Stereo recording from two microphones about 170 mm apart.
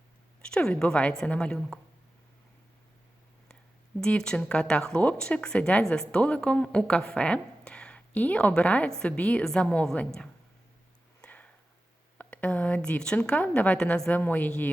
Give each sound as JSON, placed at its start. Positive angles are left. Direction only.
{"t": 0.4, "sound": "a woman's voice", "side_deg": 5}
{"t": 4.0, "sound": "a woman's voice", "side_deg": 5}
{"t": 11.2, "sound": "a sound", "side_deg": 10}
{"t": 12.1, "sound": "a woman's voice", "side_deg": 10}